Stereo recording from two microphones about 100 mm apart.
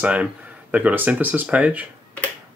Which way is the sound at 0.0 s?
15° right (ahead or behind).